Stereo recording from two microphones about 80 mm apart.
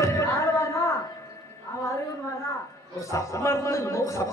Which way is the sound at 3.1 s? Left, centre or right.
Left.